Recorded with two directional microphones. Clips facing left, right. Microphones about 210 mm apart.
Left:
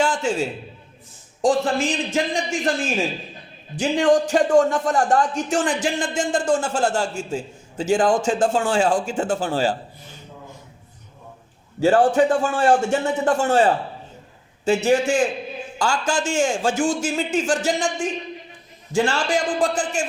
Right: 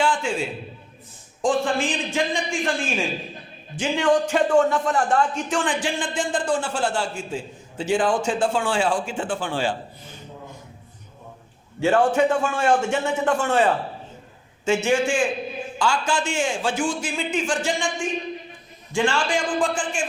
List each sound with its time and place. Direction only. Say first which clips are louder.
0.0 s a sound: left 2 dB; 40° left (ahead or behind)
1.4 s speech: left 2 dB; 40° left (ahead or behind)
11.8 s speech: left 2 dB; 35° left (ahead or behind)
18.9 s speech: left 2 dB; 40° left (ahead or behind)